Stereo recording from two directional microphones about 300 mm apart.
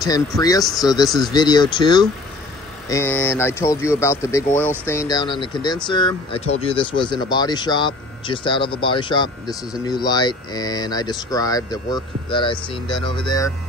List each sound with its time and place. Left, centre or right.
0.0 s speech: centre